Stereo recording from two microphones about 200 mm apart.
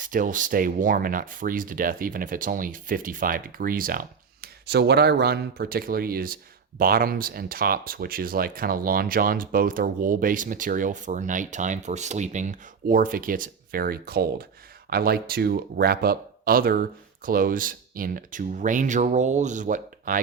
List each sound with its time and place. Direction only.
0.0 s speech: 40° right (ahead or behind)